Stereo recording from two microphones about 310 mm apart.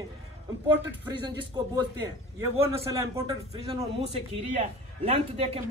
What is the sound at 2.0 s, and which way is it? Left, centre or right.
A man's voice, centre.